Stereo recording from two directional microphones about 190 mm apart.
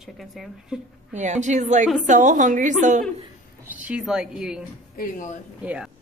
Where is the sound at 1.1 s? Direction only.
40° right (ahead or behind).